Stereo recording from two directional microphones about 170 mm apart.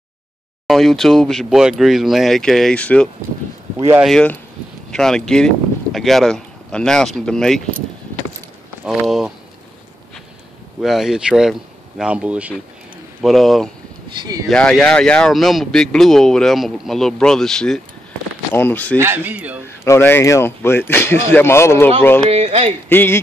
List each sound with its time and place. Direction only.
0.7 s speech: centre (ahead or behind)
8.8 s speech: 5° right (ahead or behind)
10.8 s speech: centre (ahead or behind)
14.1 s speech: 25° right (ahead or behind)
14.5 s speech: 5° left (ahead or behind)
18.9 s speech: 15° right (ahead or behind)
19.8 s speech: 15° left (ahead or behind)
22.3 s speech: 40° right (ahead or behind)
22.8 s speech: 15° left (ahead or behind)